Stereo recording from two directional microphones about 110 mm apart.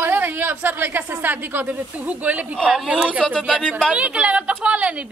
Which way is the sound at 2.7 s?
5° right (ahead or behind).